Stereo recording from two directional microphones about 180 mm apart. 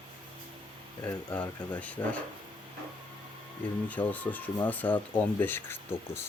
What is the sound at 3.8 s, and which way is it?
Speech, 10° left (ahead or behind).